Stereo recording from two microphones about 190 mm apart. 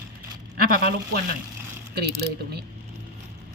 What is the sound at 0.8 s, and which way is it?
Speech, 55° right (ahead or behind).